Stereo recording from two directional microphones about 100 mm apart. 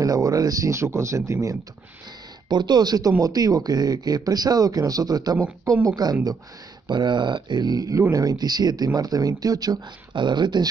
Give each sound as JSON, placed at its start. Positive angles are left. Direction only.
{"t": 0.0, "sound": "speech", "side_deg": -35}
{"t": 2.5, "sound": "speech", "side_deg": -45}